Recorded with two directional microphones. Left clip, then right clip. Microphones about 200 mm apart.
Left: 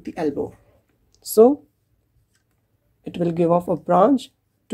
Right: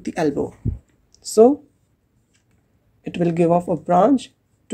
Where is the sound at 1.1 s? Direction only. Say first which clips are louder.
Right 1 dB; centre (ahead or behind).